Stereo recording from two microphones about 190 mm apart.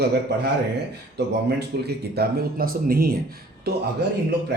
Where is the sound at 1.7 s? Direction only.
55° right (ahead or behind).